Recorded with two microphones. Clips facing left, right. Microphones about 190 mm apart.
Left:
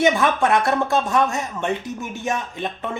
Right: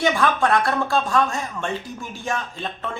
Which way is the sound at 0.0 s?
20° left (ahead or behind).